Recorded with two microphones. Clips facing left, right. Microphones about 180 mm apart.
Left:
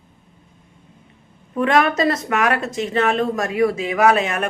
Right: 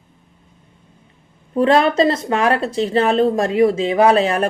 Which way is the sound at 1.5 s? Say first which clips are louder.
Right 3 dB; 30° right (ahead or behind).